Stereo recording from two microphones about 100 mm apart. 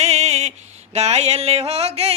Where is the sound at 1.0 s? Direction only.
90° right.